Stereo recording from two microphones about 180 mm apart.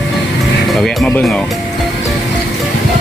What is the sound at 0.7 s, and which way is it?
Speech, centre (ahead or behind).